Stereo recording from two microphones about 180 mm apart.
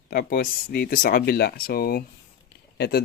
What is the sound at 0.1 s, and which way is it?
Speech, 55° left (ahead or behind).